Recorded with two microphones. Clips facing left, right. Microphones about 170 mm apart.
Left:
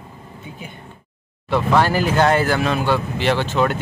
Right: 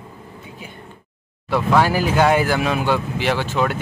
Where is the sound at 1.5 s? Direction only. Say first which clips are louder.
Even; 10° right (ahead or behind).